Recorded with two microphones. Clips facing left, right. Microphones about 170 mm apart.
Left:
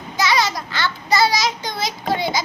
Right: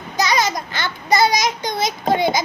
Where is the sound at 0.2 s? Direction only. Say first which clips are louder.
Right 1 dB; 45° right (ahead or behind).